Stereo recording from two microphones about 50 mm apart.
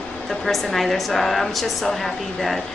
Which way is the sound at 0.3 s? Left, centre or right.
Centre.